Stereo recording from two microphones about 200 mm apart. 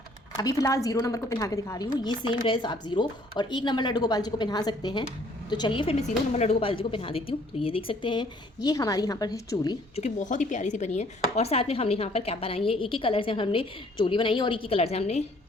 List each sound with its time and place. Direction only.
0.3 s speech: 15° left (ahead or behind)
9.9 s speech: 35° left (ahead or behind)